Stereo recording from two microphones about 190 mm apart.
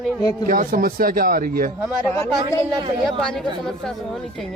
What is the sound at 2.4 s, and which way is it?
Speech, 25° right (ahead or behind).